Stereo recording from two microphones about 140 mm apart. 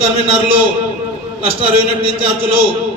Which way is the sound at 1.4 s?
40° right (ahead or behind).